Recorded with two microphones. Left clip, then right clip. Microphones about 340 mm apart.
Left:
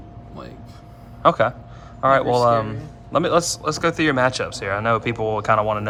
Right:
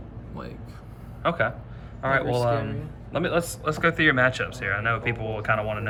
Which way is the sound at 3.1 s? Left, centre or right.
Left.